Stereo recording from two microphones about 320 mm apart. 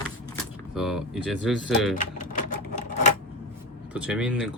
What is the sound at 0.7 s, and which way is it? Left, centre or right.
Speech, centre.